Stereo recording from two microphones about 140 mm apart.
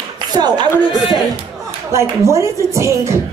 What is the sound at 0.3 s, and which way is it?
Speech, 30° right (ahead or behind).